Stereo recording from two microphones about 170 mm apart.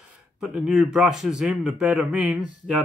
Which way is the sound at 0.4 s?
5° right (ahead or behind).